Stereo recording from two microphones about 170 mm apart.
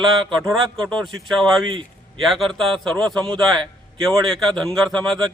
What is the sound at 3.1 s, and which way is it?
Speech, 25° right (ahead or behind).